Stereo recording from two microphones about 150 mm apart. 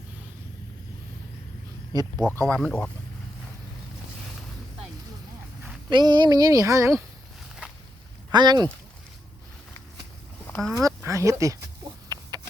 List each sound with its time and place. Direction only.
1.9 s speech: 25° right (ahead or behind)
2.5 s speech: 5° left (ahead or behind)
5.9 s speech: 30° right (ahead or behind)
8.3 s speech: 30° right (ahead or behind)
10.4 s duck: 5° left (ahead or behind)
10.8 s a sound: 20° right (ahead or behind)